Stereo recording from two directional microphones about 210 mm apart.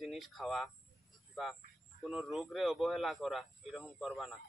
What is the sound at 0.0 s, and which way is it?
Speech, centre (ahead or behind).